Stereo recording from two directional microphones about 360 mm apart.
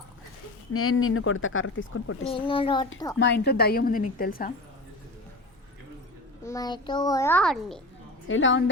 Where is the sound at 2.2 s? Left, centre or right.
Centre.